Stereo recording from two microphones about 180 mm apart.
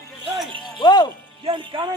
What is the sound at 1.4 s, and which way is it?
Music, 30° right (ahead or behind).